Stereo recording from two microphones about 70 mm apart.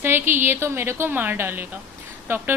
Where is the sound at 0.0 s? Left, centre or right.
Right.